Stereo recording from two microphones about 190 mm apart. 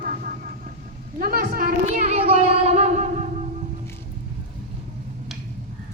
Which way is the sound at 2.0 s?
35° right (ahead or behind).